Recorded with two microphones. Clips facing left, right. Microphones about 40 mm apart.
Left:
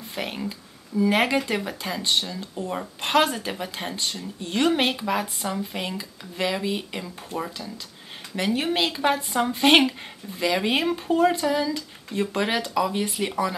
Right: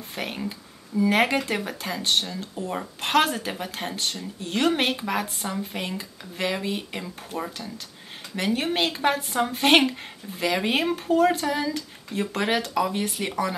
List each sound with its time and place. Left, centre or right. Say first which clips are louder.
0.1 s speech: left 1 dB; centre